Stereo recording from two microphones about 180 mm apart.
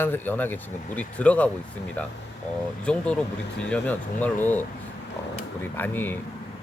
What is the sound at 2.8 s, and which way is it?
Speech, 5° left (ahead or behind).